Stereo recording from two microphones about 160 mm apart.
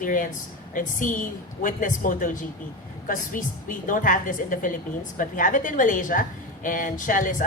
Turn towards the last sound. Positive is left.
turn(degrees=55)  # may be behind; listen again after turning